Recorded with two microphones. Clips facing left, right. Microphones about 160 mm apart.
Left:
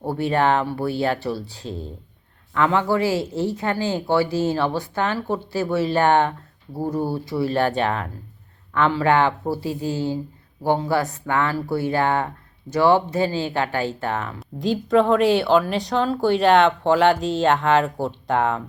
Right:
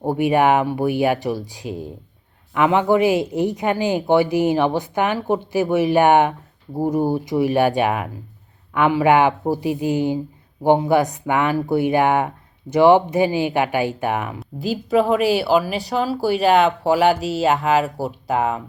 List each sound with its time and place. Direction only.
0.0 s a woman's voice: 15° right (ahead or behind)